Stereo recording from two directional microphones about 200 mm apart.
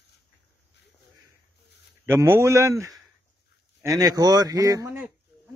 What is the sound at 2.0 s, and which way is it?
A man's voice, 10° right (ahead or behind).